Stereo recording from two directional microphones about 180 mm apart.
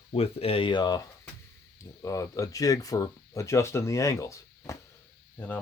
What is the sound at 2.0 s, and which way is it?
Speech, 20° left (ahead or behind).